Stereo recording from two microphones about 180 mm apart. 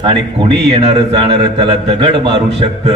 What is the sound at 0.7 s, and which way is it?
Music, 30° right (ahead or behind).